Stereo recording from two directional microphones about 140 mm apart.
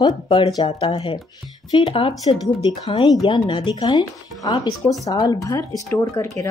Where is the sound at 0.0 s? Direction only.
35° left (ahead or behind).